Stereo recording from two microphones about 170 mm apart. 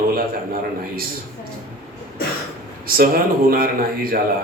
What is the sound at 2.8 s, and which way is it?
Speech, 60° right (ahead or behind).